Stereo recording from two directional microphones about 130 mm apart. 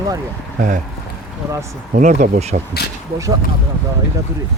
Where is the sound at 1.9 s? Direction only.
70° right (ahead or behind).